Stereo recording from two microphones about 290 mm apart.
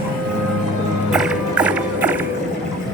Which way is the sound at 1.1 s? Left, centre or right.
Centre.